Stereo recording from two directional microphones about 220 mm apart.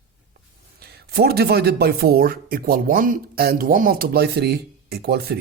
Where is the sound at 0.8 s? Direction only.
45° right (ahead or behind).